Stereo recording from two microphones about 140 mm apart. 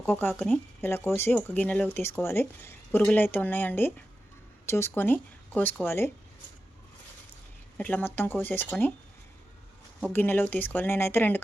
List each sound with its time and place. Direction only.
0.0 s speech: 15° left (ahead or behind)
7.8 s speech: 10° left (ahead or behind)
10.1 s speech: 15° left (ahead or behind)